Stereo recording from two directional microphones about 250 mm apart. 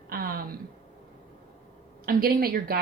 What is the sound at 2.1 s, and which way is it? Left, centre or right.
Speech, right.